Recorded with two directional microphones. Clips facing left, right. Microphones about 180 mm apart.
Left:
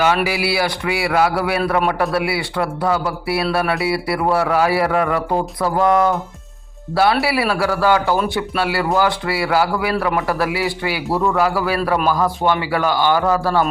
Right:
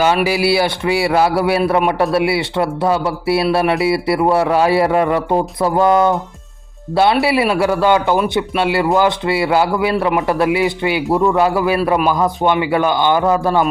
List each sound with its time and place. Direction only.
0.3 s a man's voice: 30° right (ahead or behind)